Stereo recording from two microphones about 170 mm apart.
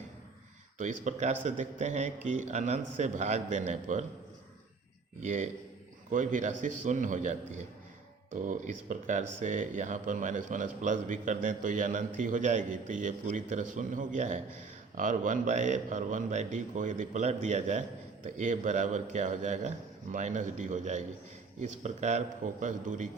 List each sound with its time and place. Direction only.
0.8 s a man's voice: 45° right (ahead or behind)
5.2 s a man's voice: 45° right (ahead or behind)